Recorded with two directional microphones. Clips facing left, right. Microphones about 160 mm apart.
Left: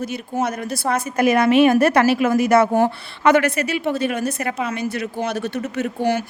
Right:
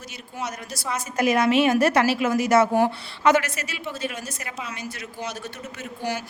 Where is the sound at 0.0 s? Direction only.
55° left (ahead or behind).